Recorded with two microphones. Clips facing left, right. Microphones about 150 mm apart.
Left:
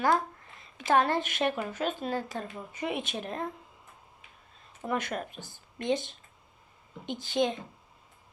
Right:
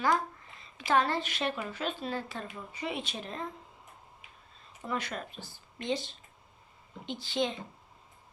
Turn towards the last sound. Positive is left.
turn(degrees=50)  # may be behind; listen again after turning